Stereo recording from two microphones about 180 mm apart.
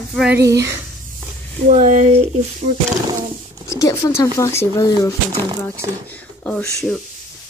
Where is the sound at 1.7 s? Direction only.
45° right (ahead or behind).